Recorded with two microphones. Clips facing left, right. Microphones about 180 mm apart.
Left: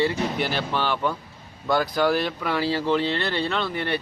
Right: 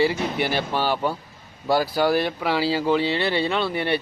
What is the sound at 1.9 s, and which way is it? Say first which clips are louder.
A man's voice: right 1 dB; 10° right (ahead or behind).